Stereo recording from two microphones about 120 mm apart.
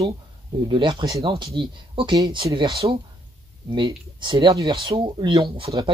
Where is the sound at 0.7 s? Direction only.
40° right (ahead or behind).